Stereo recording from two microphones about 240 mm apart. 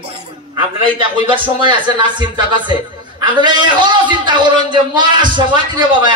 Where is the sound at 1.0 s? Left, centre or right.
Right.